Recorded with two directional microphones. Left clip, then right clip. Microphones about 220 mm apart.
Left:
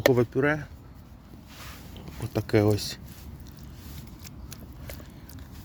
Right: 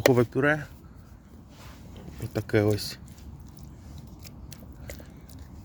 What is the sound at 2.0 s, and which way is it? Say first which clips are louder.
Speech: left 1 dB; 5° left (ahead or behind).